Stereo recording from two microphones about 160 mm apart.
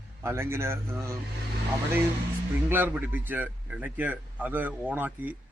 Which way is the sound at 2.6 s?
10° right (ahead or behind).